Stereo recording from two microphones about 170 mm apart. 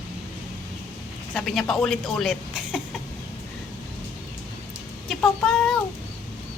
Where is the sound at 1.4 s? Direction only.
5° left (ahead or behind).